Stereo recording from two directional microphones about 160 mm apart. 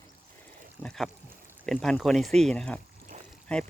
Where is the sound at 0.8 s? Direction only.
5° left (ahead or behind).